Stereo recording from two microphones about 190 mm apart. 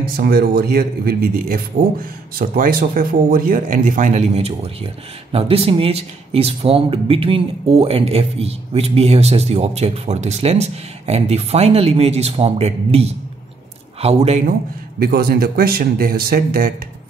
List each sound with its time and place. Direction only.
0.2 s speech: 55° right (ahead or behind); by 14.5 s 35° right (ahead or behind)
15.0 s speech: 55° right (ahead or behind)